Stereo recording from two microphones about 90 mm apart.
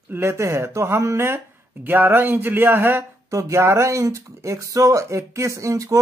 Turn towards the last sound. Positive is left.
turn(degrees=-35)  # may be behind; listen again after turning